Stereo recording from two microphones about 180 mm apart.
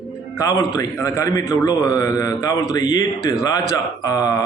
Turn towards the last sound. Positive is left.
turn(degrees=20)  # may be behind; listen again after turning